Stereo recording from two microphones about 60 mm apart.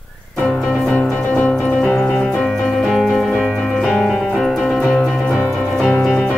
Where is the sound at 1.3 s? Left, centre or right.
Left.